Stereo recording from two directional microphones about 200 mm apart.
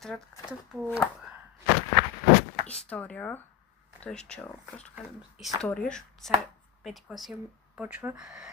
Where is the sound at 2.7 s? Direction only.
5° left (ahead or behind).